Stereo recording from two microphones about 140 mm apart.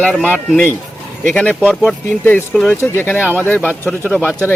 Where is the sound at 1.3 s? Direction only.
5° left (ahead or behind).